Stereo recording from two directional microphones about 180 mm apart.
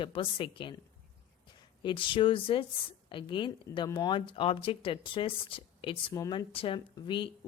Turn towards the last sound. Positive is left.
turn(degrees=30)  # may be behind; listen again after turning